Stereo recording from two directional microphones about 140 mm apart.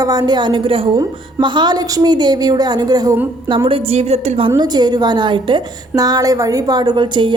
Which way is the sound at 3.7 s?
45° right (ahead or behind).